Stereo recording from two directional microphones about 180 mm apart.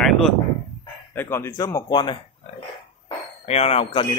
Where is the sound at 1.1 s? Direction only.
10° left (ahead or behind).